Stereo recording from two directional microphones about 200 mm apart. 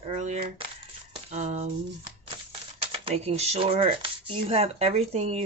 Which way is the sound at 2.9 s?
30° right (ahead or behind).